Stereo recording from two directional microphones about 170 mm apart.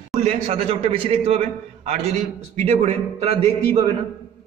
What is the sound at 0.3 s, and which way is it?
A man's voice, 35° right (ahead or behind).